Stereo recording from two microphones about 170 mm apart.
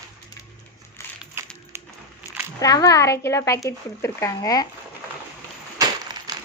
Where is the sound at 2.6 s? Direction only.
20° left (ahead or behind).